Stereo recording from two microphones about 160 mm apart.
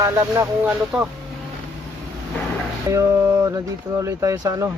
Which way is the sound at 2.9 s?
20° right (ahead or behind).